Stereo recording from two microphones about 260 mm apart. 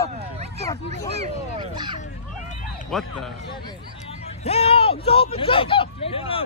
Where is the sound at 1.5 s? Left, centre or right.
Centre.